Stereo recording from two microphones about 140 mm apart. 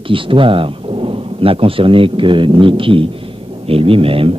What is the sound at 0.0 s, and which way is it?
Speech, 40° right (ahead or behind).